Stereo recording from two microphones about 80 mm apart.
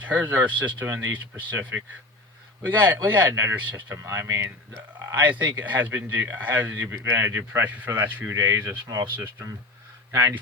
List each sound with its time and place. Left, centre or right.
0.0 s speech: right
0.9 s speech: right
1.1 s speech: right
3.9 s speech: right
5.2 s speech: centre; by 9.5 s right
10.1 s speech: right